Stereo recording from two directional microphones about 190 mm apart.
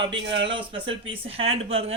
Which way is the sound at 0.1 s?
65° right (ahead or behind).